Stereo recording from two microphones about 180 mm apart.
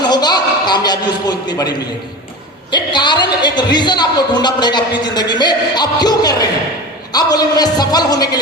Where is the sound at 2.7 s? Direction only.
25° left (ahead or behind).